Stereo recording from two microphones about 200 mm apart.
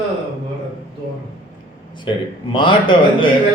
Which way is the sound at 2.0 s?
25° left (ahead or behind).